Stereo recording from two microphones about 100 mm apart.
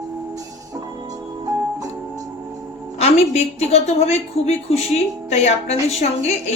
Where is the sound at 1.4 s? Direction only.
35° right (ahead or behind).